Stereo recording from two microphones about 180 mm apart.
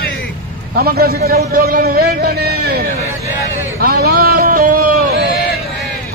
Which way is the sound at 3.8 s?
55° right (ahead or behind).